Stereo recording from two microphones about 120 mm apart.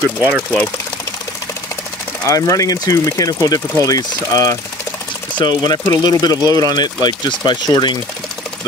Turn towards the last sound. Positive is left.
turn(degrees=35)  # may be behind; listen again after turning